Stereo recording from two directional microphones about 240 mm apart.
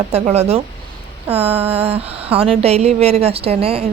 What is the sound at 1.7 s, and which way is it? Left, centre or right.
Speech, right.